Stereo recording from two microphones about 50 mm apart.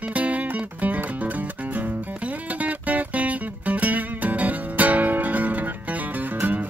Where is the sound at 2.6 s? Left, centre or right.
Right.